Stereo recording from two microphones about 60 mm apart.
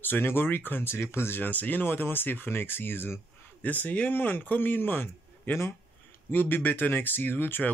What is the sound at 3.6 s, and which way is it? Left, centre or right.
Speech, left.